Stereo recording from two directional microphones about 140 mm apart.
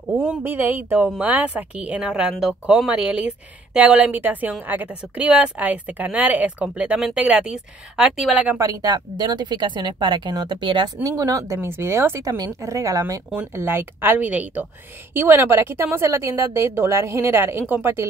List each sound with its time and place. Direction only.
0.1 s speech: 15° right (ahead or behind)
8.5 s a woman's voice: 25° right (ahead or behind)